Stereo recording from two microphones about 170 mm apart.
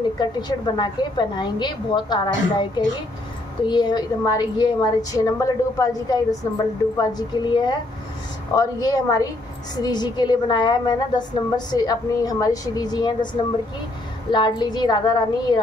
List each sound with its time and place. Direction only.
0.2 s a woman's voice: 25° left (ahead or behind)